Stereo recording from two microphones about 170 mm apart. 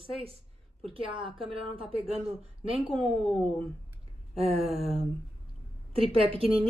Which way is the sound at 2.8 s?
5° right (ahead or behind).